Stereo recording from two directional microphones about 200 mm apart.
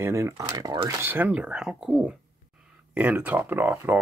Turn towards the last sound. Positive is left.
turn(degrees=-10)  # may be behind; listen again after turning